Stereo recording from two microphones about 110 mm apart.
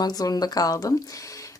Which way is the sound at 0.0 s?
35° left (ahead or behind).